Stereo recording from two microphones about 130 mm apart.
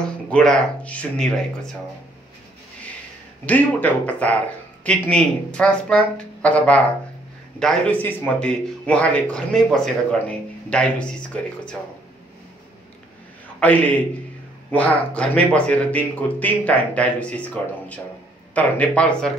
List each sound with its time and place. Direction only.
0.0 s speech: 5° left (ahead or behind)
3.4 s speech: 15° left (ahead or behind)
13.6 s speech: 10° left (ahead or behind)